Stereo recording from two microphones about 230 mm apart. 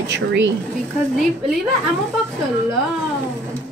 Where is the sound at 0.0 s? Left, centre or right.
Right.